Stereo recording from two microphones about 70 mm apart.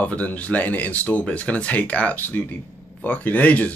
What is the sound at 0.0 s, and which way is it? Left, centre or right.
Speech, left.